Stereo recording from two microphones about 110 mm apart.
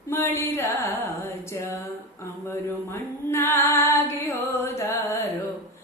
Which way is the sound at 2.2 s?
25° left (ahead or behind).